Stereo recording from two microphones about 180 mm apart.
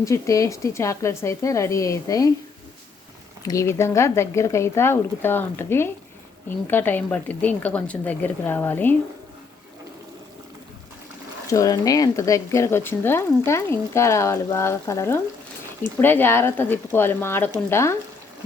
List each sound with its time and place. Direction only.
0.0 s speech: 15° left (ahead or behind)
3.4 s speech: 15° left (ahead or behind)
11.4 s speech: 20° left (ahead or behind)